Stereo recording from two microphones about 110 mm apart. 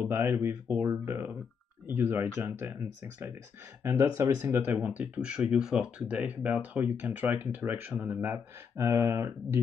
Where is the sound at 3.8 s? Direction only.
30° right (ahead or behind).